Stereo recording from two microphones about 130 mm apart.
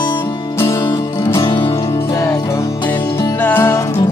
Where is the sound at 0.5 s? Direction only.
20° left (ahead or behind).